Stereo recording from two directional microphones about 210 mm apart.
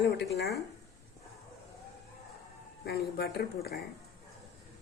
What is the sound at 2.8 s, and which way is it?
Speech, 50° left (ahead or behind).